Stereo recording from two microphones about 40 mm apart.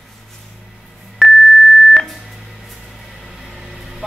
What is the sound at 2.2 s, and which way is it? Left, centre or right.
Vehicle, centre.